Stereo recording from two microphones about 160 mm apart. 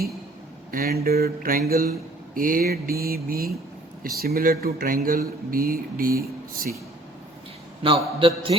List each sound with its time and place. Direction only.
0.7 s speech: 70° right (ahead or behind)
7.8 s a man's voice: 35° right (ahead or behind)